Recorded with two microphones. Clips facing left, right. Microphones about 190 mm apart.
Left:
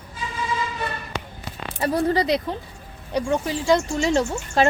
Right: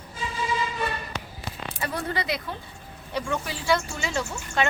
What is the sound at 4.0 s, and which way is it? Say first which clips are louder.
Speech: left 9 dB; 35° left (ahead or behind).